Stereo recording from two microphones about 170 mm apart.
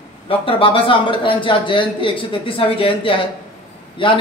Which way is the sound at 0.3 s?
30° left (ahead or behind).